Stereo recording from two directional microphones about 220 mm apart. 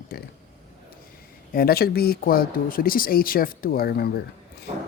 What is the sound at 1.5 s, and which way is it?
Speech, 45° left (ahead or behind).